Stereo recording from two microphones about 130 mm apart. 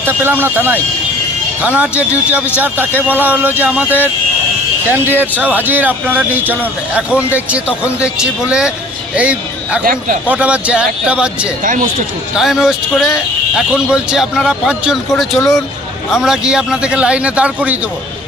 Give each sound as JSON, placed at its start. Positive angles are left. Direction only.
{"t": 0.0, "sound": "speech", "side_deg": -15}
{"t": 9.8, "sound": "a man's voice", "side_deg": -90}
{"t": 10.2, "sound": "speech", "side_deg": -10}